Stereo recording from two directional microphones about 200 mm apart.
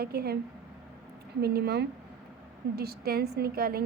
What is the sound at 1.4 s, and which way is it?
A woman's voice, 55° right (ahead or behind).